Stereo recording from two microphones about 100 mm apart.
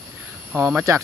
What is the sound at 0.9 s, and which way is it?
Speech, 35° right (ahead or behind).